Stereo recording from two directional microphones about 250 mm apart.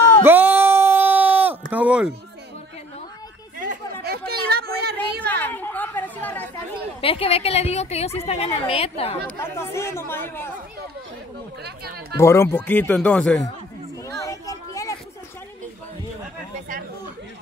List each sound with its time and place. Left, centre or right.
0.2 s a sound: centre
3.5 s chatter: right
4.3 s a sound: right
5.2 s chatter: centre
7.0 s a woman's voice: left
9.4 s speech: centre
11.6 s speech: right
12.2 s speech: centre
14.0 s a sound: centre